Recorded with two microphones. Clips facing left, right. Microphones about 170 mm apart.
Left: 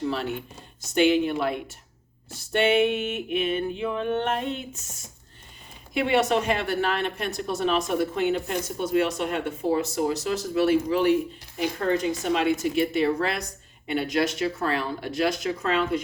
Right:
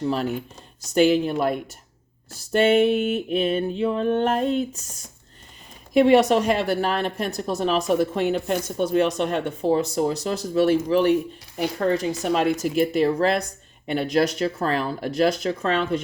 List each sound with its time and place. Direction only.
0.1 s speech: 40° right (ahead or behind)
5.9 s speech: 40° right (ahead or behind)